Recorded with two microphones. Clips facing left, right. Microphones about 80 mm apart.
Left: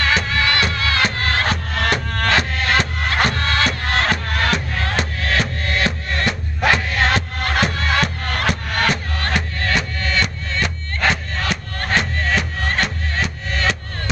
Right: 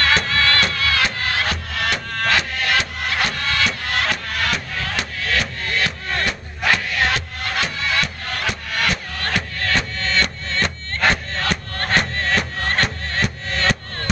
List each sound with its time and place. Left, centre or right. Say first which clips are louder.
0.0 s music: even; centre; by 7.2 s left
7.4 s music: left 3 dB; left
9.3 s music: even; centre